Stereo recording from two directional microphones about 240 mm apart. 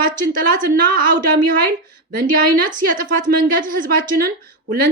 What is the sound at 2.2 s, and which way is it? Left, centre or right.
A woman's voice, right.